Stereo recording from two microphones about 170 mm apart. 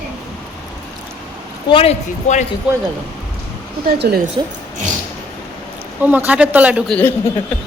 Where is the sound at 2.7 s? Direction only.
5° right (ahead or behind).